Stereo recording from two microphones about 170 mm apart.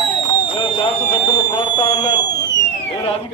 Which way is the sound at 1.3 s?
25° left (ahead or behind).